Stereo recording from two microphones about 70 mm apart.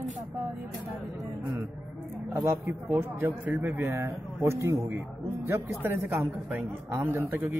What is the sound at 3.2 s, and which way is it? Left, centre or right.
A man's voice, right.